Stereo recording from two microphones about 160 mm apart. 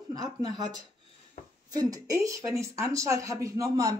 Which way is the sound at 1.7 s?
25° right (ahead or behind).